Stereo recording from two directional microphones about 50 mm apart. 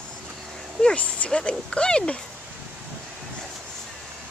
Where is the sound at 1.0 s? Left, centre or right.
Left.